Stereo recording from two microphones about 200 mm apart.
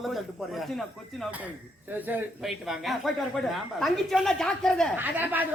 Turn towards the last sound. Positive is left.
turn(degrees=-10)  # may be behind; listen again after turning